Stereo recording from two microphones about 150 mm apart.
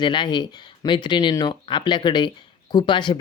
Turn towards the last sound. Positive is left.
turn(degrees=30)  # may be behind; listen again after turning